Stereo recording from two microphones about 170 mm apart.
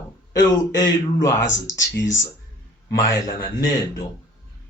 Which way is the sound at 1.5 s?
90° left.